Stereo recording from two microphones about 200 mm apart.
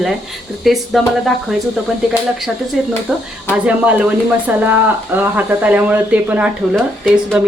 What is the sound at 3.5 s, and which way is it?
Speech, 5° right (ahead or behind).